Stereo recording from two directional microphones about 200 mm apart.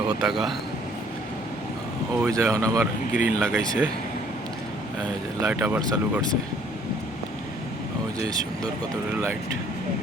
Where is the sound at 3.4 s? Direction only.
5° left (ahead or behind).